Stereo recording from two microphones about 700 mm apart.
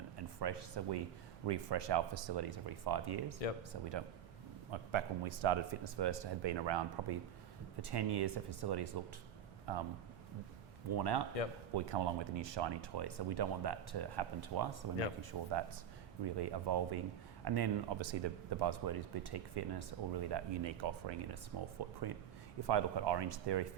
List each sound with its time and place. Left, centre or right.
0.2 s speech: right
4.7 s speech: right
10.9 s speech: right